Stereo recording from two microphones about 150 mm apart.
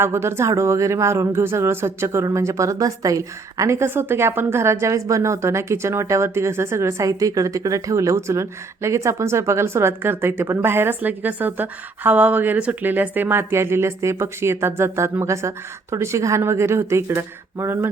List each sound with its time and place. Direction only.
0.0 s speech: 15° right (ahead or behind)